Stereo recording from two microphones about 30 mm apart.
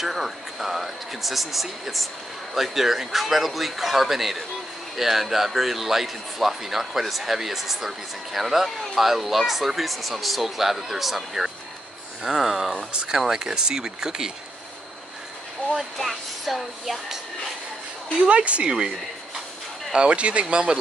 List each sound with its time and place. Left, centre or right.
0.0 s a man's voice: centre; by 14.3 s right
16.0 s speech: centre
18.3 s speech: right
19.9 s speech: right